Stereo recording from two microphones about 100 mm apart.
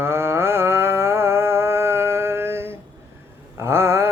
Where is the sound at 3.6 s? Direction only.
25° right (ahead or behind).